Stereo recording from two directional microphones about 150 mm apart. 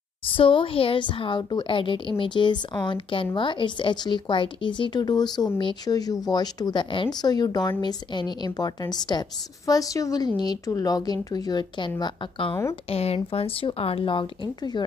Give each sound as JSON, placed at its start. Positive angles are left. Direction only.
{"t": 0.3, "sound": "a woman's voice", "side_deg": 35}